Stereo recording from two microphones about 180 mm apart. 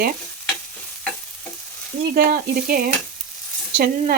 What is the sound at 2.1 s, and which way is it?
Sizzle, 55° right (ahead or behind).